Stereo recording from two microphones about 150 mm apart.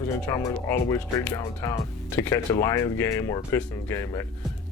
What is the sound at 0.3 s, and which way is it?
Speech, 20° left (ahead or behind).